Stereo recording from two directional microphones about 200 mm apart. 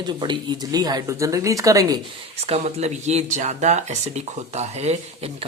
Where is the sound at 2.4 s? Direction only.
30° right (ahead or behind).